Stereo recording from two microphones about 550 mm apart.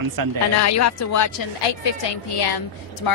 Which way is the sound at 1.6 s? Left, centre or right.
Left.